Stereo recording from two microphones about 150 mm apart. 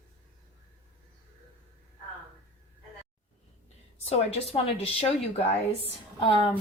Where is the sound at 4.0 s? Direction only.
45° left (ahead or behind).